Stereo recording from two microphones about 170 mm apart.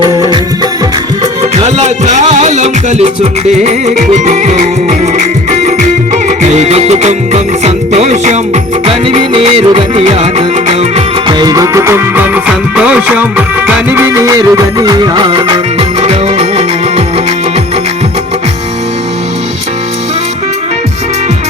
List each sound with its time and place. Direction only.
0.0 s music: 25° right (ahead or behind)
1.5 s music: 40° right (ahead or behind)
8.9 s music: 30° right (ahead or behind)
11.3 s music: 20° right (ahead or behind)